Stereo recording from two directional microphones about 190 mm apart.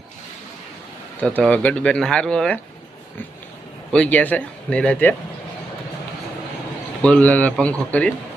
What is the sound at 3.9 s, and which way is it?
Speech, 5° left (ahead or behind).